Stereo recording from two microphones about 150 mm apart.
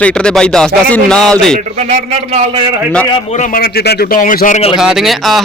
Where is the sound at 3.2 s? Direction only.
55° left (ahead or behind).